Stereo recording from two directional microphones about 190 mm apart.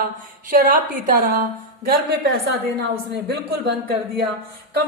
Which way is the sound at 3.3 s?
60° right (ahead or behind).